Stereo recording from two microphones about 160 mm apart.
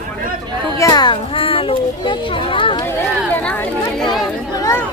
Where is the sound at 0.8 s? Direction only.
25° left (ahead or behind).